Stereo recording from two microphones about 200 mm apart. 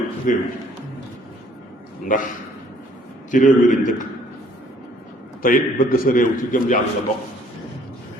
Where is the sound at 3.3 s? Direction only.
40° left (ahead or behind).